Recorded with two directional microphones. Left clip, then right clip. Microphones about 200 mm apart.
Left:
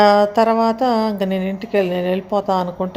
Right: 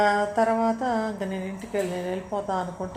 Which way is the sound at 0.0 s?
50° left (ahead or behind).